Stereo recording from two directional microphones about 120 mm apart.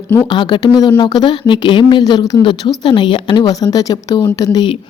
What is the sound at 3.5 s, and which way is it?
Speech, 30° left (ahead or behind).